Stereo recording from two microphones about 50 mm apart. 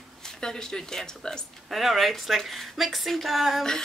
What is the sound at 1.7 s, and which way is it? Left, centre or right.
A woman's voice, centre.